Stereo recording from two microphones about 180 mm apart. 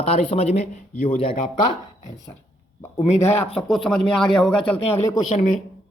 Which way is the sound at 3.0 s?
35° left (ahead or behind).